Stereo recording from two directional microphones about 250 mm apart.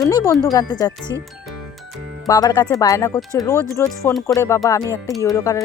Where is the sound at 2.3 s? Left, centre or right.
Centre.